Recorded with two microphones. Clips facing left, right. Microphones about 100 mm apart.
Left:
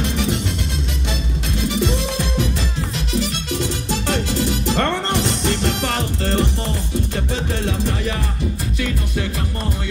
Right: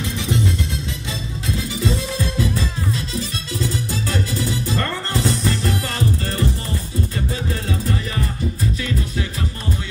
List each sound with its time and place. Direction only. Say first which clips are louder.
0.0 s music: left 3 dB; 70° left (ahead or behind)
1.6 s music: left 4 dB; 80° left
8.7 s music: left 1 dB; 65° left (ahead or behind)